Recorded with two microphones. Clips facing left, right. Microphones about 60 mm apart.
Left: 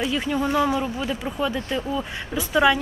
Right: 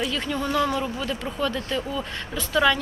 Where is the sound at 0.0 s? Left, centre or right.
Centre.